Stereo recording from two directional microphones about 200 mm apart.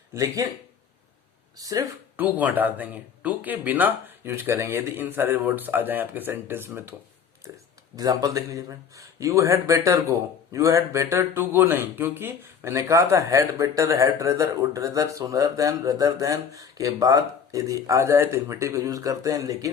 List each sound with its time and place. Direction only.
0.1 s a man's voice: 15° right (ahead or behind)
1.6 s a man's voice: 15° right (ahead or behind)
7.9 s a man's voice: 20° right (ahead or behind)